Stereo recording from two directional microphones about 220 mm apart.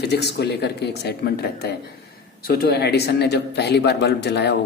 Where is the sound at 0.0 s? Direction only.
50° left (ahead or behind).